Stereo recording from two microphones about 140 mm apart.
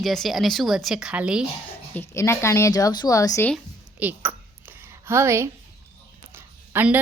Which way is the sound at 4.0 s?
15° right (ahead or behind).